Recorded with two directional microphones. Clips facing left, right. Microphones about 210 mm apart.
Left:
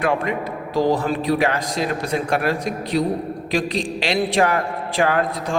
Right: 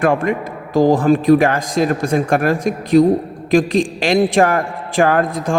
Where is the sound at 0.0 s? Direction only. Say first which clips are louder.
Right 5 dB; 50° right (ahead or behind).